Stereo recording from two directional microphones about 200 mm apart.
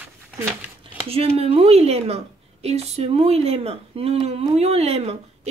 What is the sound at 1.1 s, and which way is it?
A woman's voice, 30° right (ahead or behind).